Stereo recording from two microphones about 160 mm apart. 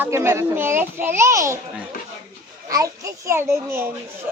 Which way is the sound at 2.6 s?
20° right (ahead or behind).